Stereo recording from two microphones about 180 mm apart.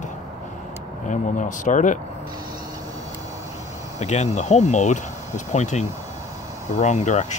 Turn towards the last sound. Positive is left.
turn(degrees=40)  # may be behind; listen again after turning